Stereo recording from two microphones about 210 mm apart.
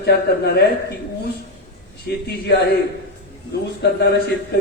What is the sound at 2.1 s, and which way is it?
Speech, 50° left (ahead or behind).